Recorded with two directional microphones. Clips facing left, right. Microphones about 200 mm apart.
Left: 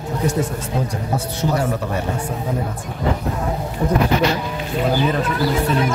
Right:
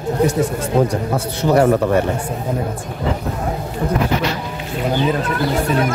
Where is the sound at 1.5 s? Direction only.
65° right (ahead or behind).